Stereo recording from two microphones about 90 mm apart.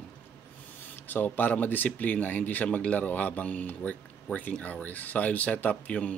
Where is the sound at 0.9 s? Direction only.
20° left (ahead or behind).